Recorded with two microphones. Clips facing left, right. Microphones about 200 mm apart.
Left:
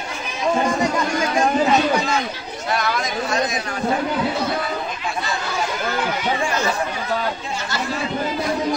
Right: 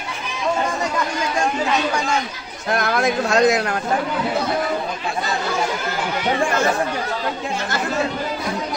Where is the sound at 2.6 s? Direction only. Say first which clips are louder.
Right 4 dB; 55° right (ahead or behind).